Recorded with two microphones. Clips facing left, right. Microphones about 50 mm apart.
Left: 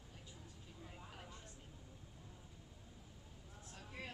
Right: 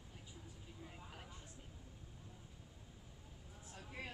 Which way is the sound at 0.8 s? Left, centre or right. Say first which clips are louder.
Even; centre.